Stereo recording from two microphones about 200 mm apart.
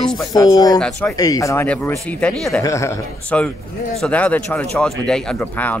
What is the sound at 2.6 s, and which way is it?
Speech, 15° left (ahead or behind).